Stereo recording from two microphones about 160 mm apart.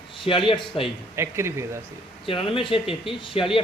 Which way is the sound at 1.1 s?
15° right (ahead or behind).